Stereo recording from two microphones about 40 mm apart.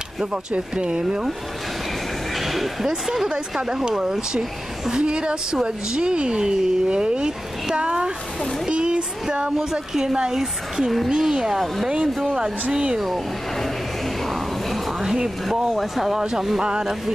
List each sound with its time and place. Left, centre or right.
0.2 s a woman's voice: right
2.3 s speech: centre
2.9 s a woman's voice: centre
8.6 s a sound: right
9.6 s a woman's voice: centre
13.0 s a sound: centre
15.0 s speech: centre
15.7 s speech: centre
16.1 s speech: centre